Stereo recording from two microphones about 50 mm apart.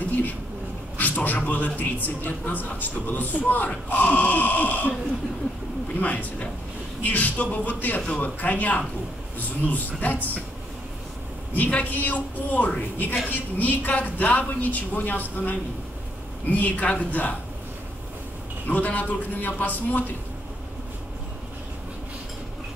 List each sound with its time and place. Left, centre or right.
0.9 s a sound: left
1.4 s a man's voice: left
5.9 s a man's voice: left
11.5 s a man's voice: left
18.7 s a man's voice: left